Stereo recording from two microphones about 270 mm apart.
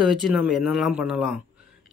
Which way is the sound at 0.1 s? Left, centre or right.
Centre.